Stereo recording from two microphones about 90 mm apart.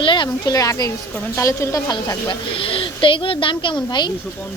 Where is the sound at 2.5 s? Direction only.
80° left.